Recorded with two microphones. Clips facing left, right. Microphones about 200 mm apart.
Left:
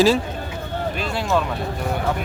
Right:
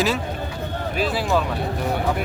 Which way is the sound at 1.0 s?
Centre (ahead or behind).